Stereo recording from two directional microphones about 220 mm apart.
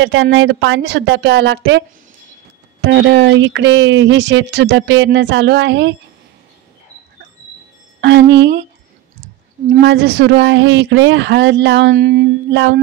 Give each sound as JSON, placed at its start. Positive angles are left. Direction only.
{"t": 0.0, "sound": "a woman's voice", "side_deg": -60}
{"t": 8.0, "sound": "speech", "side_deg": -50}
{"t": 9.7, "sound": "speech", "side_deg": -50}